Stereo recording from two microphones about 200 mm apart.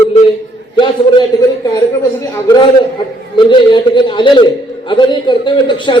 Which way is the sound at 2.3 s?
15° left (ahead or behind).